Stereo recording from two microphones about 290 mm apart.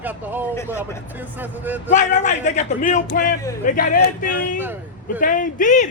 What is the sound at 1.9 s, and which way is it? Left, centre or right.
Speech, left.